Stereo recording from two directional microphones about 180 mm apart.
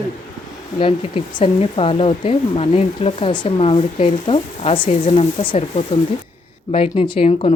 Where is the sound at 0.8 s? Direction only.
30° left (ahead or behind).